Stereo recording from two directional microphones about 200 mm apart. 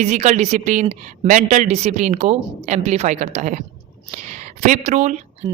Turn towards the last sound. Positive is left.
turn(degrees=-35)  # may be behind; listen again after turning